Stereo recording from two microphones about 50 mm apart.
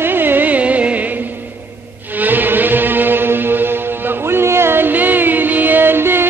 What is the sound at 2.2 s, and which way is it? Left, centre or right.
Music, right.